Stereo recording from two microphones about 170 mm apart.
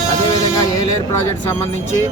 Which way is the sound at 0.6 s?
20° left (ahead or behind).